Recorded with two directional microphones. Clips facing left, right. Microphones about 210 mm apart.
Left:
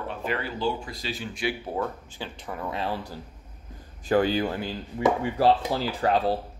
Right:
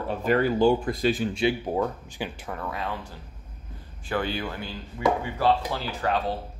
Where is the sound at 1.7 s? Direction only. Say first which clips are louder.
Right 3 dB; 15° right (ahead or behind).